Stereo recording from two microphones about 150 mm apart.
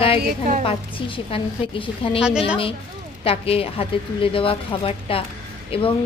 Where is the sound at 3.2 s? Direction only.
40° left (ahead or behind).